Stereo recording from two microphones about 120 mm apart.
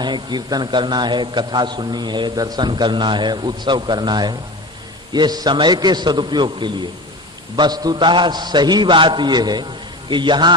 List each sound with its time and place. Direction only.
0.0 s a man's voice: 35° right (ahead or behind)